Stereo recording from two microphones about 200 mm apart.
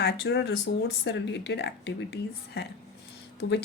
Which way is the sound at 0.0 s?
55° left (ahead or behind).